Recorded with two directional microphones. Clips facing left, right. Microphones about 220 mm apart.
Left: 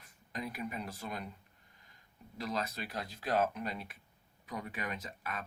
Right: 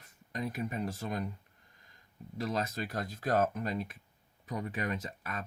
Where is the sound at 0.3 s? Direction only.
45° right (ahead or behind).